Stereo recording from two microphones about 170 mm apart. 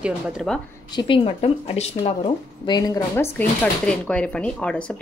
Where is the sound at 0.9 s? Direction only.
30° left (ahead or behind).